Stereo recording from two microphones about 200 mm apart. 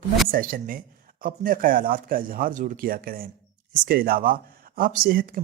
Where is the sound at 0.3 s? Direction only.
45° right (ahead or behind).